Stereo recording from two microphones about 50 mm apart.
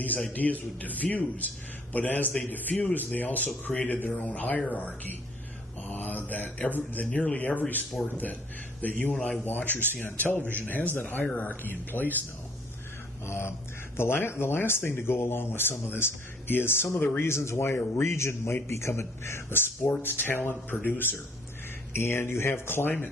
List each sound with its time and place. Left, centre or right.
0.3 s a man's voice: left
5.9 s mantra: left
6.7 s a man's voice: left
9.1 s speech: left
9.4 s a man's voice: left
13.2 s speech: left
17.6 s a man's voice: left
18.0 s a man's voice: left
21.9 s a man's voice: left